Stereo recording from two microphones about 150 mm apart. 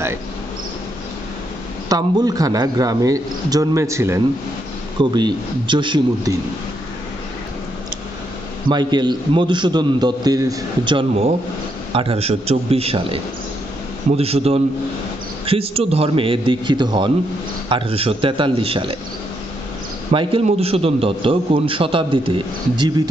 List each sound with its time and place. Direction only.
1.9 s speech: 25° right (ahead or behind)
5.1 s speech: 30° right (ahead or behind)
8.6 s a man's voice: 30° right (ahead or behind)
20.1 s a man's voice: 35° right (ahead or behind)